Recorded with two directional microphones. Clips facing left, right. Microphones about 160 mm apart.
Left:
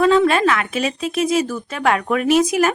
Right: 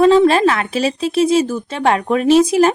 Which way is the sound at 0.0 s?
30° right (ahead or behind).